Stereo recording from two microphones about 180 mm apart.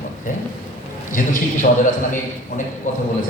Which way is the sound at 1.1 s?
45° left (ahead or behind).